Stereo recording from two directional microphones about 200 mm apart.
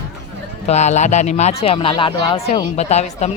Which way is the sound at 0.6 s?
35° left (ahead or behind).